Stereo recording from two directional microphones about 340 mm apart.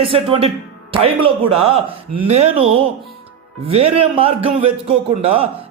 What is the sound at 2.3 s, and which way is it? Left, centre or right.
A man's voice, centre.